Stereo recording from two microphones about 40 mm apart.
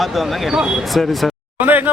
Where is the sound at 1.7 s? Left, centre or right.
Right.